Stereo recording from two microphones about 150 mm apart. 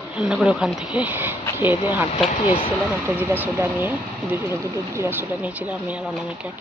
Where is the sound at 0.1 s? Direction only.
5° right (ahead or behind).